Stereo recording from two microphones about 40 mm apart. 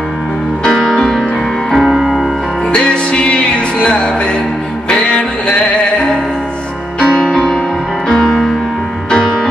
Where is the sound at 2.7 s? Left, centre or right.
Left.